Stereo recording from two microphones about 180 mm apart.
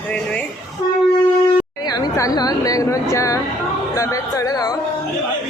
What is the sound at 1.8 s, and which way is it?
Speech, 20° left (ahead or behind).